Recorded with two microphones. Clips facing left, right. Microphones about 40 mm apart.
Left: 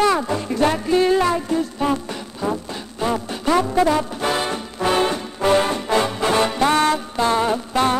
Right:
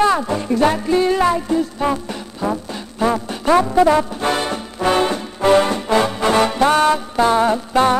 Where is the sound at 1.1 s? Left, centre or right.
Centre.